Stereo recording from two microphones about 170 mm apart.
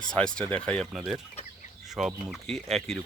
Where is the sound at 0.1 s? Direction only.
5° left (ahead or behind).